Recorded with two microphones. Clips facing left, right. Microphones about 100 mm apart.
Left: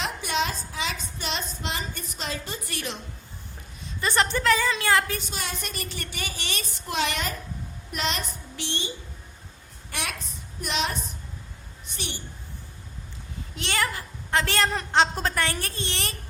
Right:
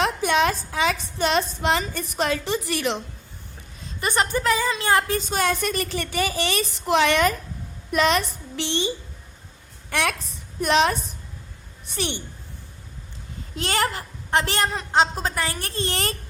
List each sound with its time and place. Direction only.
0.3 s a woman's voice: 60° right (ahead or behind); by 3.0 s 90° right
4.0 s a woman's voice: 15° right (ahead or behind)
4.7 s speech: 25° right (ahead or behind)
5.3 s a woman's voice: 50° right (ahead or behind)
5.7 s a woman's voice: 90° right
9.9 s a woman's voice: 60° right (ahead or behind)
11.9 s a woman's voice: 75° right (ahead or behind)
13.6 s a child's voice: 40° right (ahead or behind)
13.8 s a woman's voice: 25° right (ahead or behind)
14.7 s a woman's voice: 5° right (ahead or behind)
15.7 s a child's voice: 35° right (ahead or behind)